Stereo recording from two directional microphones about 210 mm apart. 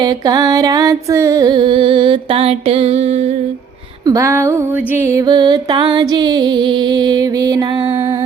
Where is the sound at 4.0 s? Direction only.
15° right (ahead or behind).